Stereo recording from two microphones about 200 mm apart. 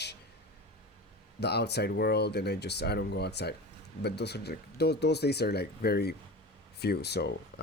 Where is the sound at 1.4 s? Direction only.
55° left (ahead or behind).